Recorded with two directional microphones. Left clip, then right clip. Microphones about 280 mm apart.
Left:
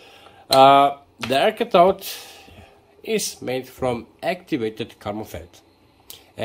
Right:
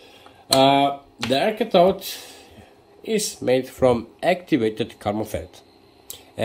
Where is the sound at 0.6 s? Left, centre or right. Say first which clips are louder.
Left 5 dB; centre.